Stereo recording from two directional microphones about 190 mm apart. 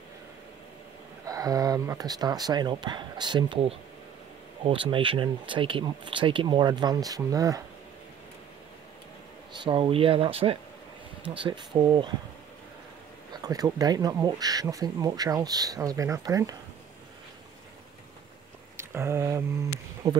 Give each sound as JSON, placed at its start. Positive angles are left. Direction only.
{"t": 1.2, "sound": "speech", "side_deg": -20}
{"t": 9.6, "sound": "speech", "side_deg": -25}
{"t": 13.3, "sound": "speech", "side_deg": -20}
{"t": 18.8, "sound": "speech", "side_deg": -15}